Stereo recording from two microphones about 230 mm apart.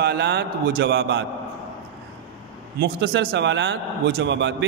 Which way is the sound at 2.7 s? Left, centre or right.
Right.